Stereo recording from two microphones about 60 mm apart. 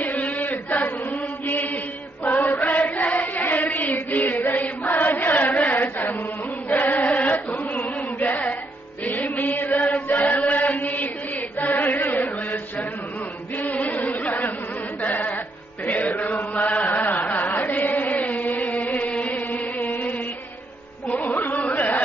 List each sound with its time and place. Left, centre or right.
0.0 s chant: left
2.4 s chant: left
9.0 s music: left
9.8 s chant: left
13.6 s singing: left
15.0 s music: left
15.8 s chant: left
18.1 s music: left
21.6 s a sound: left